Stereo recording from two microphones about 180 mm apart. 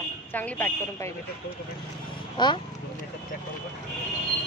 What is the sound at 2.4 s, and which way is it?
Speech, 25° left (ahead or behind).